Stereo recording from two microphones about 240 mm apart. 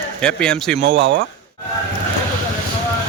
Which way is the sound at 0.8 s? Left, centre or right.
Right.